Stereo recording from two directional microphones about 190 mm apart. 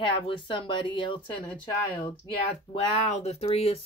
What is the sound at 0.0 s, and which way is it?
Speech, 25° left (ahead or behind).